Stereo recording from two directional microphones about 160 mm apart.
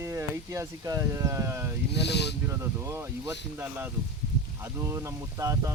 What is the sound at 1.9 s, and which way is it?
Speech, 90° left.